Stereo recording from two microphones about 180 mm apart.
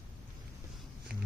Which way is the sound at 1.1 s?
60° right (ahead or behind).